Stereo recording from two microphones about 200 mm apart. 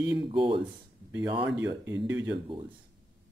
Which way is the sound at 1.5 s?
15° right (ahead or behind).